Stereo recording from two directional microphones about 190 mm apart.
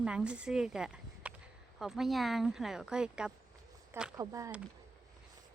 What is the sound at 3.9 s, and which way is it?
Speech, 15° right (ahead or behind).